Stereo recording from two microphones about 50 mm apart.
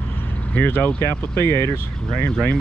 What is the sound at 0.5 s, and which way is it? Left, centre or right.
Speech, left.